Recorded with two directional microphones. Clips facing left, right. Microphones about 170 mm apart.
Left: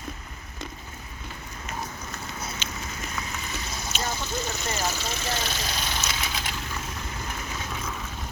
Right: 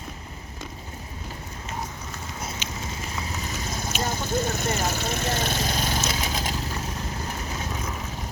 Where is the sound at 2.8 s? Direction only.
25° right (ahead or behind).